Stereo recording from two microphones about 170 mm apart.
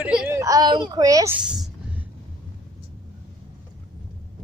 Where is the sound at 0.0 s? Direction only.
10° right (ahead or behind).